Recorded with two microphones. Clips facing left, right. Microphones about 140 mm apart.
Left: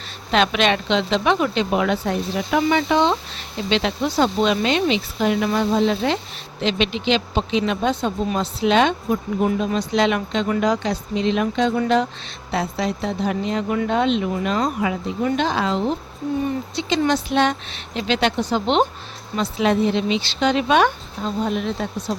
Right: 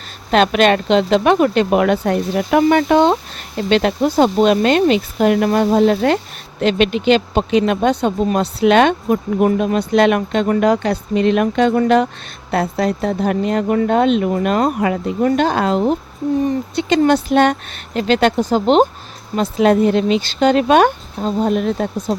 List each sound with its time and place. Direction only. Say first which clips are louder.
0.3 s speech: right 6 dB; 45° right (ahead or behind)